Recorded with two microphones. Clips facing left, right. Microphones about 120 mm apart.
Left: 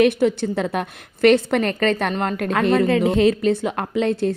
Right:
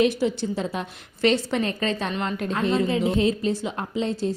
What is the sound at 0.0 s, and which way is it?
Speech, 60° left (ahead or behind).